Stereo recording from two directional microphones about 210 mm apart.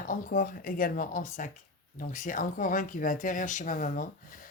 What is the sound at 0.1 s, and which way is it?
Speech, 40° left (ahead or behind).